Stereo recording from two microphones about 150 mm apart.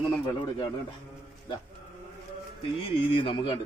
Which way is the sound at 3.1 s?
35° left (ahead or behind).